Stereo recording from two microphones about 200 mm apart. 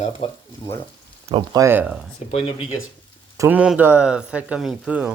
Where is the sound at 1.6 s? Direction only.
10° right (ahead or behind).